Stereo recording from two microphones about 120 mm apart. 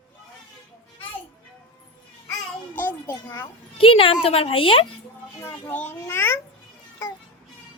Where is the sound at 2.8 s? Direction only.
20° left (ahead or behind).